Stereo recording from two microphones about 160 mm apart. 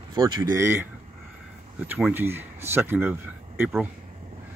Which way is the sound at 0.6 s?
15° right (ahead or behind).